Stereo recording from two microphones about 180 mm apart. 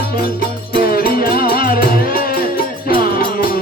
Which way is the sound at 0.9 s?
55° left (ahead or behind).